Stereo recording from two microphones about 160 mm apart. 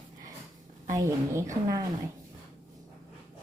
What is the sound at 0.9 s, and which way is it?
Speech, 20° right (ahead or behind).